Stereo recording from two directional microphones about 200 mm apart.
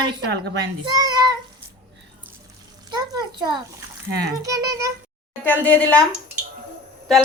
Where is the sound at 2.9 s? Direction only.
20° right (ahead or behind).